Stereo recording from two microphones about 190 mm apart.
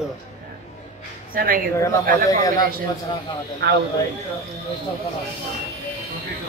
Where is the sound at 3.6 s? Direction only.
60° right (ahead or behind).